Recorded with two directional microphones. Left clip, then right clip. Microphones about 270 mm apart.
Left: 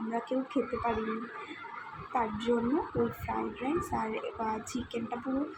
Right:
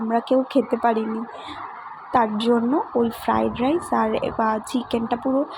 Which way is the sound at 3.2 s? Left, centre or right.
Right.